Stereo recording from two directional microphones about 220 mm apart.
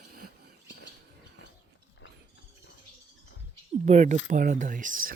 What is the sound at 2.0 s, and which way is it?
Ratchet, 55° left (ahead or behind).